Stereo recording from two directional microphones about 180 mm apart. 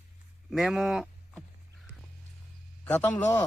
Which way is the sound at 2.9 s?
10° left (ahead or behind).